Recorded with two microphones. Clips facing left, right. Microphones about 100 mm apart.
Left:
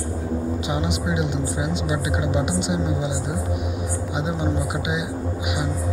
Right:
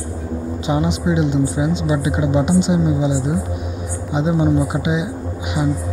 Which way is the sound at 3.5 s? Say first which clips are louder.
Even; 15° left (ahead or behind).